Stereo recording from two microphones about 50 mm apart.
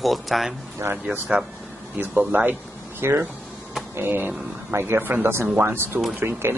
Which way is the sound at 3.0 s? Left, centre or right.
Right.